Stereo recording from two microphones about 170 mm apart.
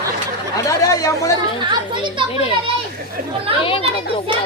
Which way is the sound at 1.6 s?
30° right (ahead or behind).